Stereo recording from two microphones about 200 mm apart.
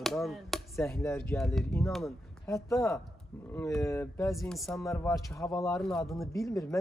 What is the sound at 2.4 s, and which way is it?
Speech, 15° left (ahead or behind).